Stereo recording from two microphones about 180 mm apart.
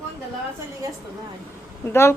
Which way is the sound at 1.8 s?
15° left (ahead or behind).